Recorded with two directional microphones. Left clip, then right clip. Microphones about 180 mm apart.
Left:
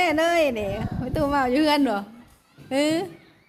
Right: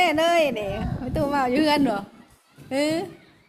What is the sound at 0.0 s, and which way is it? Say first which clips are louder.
A woman's voice: right 1 dB; 15° left (ahead or behind).